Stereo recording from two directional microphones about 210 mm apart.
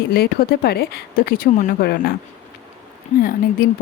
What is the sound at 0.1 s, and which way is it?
Speech, 45° left (ahead or behind).